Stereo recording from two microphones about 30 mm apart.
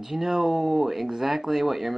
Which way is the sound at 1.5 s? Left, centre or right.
Centre.